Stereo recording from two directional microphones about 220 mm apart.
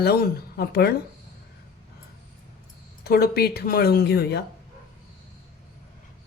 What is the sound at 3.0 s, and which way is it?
A woman's voice, 45° left (ahead or behind).